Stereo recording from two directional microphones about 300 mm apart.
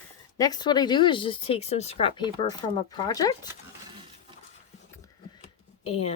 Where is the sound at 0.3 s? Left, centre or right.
Centre.